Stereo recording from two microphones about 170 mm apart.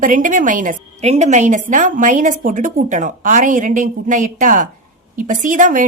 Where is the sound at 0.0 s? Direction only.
50° right (ahead or behind).